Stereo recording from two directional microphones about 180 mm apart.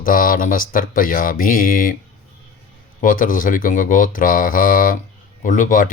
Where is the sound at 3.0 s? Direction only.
50° left (ahead or behind).